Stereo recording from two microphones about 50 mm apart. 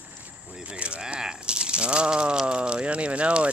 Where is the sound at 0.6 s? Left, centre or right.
Right.